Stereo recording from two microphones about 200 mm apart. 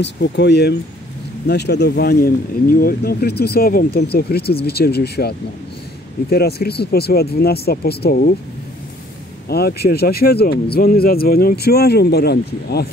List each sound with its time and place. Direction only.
0.0 s speech: 60° left (ahead or behind)
6.3 s speech: 50° left (ahead or behind)
9.5 s speech: 50° left (ahead or behind)